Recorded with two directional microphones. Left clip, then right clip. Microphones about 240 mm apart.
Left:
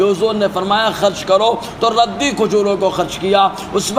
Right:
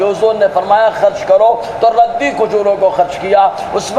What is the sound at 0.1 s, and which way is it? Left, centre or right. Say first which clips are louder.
A man's voice: right 4 dB; left.